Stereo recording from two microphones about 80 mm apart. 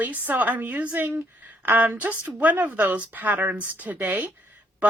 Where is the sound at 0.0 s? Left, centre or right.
Right.